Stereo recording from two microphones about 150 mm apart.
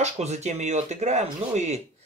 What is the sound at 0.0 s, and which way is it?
Speech, 50° right (ahead or behind).